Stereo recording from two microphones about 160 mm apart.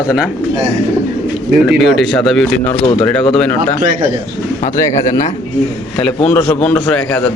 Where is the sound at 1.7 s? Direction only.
Centre (ahead or behind).